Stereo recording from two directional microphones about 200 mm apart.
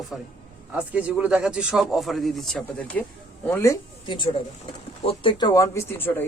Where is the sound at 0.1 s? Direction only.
Centre (ahead or behind).